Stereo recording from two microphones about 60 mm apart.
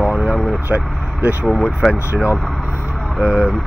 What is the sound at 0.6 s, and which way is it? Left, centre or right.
Speech, right.